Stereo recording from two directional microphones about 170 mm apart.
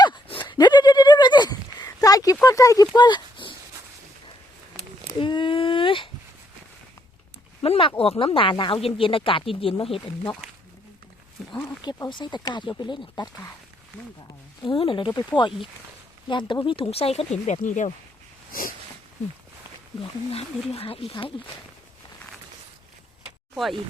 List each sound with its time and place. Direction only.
0.0 s horse: 25° left (ahead or behind)
2.9 s a sound: 25° left (ahead or behind)
5.2 s a sound: 30° left (ahead or behind)
7.6 s speech: 35° left (ahead or behind)
11.5 s speech: 10° left (ahead or behind)
11.8 s speech: 25° left (ahead or behind)
14.7 s speech: 30° left (ahead or behind)
16.3 s speech: 30° left (ahead or behind); by 17.9 s 45° left (ahead or behind)
20.3 s speech: 35° left (ahead or behind)